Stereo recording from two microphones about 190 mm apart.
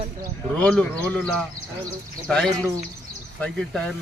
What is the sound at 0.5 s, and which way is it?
A man's voice, 5° left (ahead or behind).